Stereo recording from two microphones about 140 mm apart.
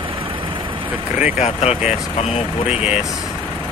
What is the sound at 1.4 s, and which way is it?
Speech, 55° left (ahead or behind).